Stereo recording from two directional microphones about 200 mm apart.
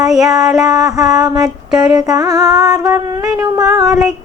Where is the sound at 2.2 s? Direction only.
20° right (ahead or behind).